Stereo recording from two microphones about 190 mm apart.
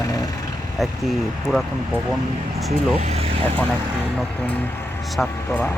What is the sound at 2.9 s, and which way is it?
Vehicle, 35° right (ahead or behind).